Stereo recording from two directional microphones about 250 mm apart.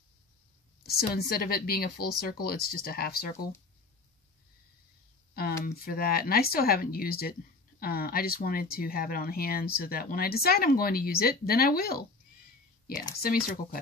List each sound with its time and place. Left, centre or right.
0.8 s speech: left
5.3 s speech: left
13.1 s speech: left